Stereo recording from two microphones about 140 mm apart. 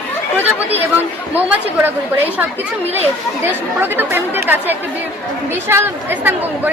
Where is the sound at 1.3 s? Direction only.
10° right (ahead or behind).